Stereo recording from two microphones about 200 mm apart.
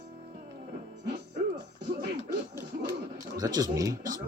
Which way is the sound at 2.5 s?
15° right (ahead or behind).